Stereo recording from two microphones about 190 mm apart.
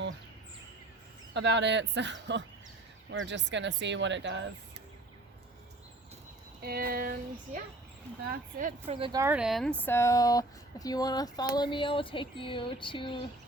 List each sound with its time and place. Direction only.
1.3 s speech: 65° right (ahead or behind)
6.6 s child singing: 55° right (ahead or behind)
8.9 s a woman's voice: 25° right (ahead or behind)
9.2 s speech: 5° right (ahead or behind); by 13.1 s 25° left (ahead or behind)